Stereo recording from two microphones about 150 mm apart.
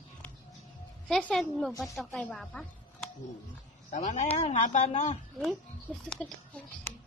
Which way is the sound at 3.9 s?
55° left (ahead or behind).